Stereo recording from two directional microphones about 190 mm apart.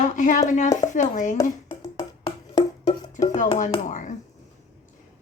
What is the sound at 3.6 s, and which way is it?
Speech, 40° left (ahead or behind).